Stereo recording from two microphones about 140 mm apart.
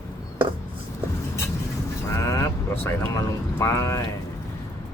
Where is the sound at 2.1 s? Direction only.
25° left (ahead or behind).